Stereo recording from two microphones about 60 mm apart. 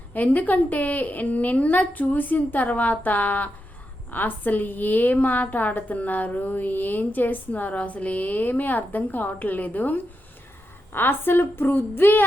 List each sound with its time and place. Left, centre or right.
0.1 s a woman's voice: left